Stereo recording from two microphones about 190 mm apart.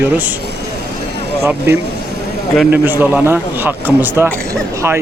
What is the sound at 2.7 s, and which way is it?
A man's voice, 10° right (ahead or behind).